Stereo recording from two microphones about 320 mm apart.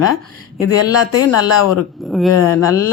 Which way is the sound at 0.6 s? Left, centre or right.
Left.